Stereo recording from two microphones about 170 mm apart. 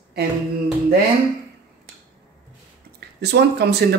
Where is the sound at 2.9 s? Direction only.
75° right (ahead or behind).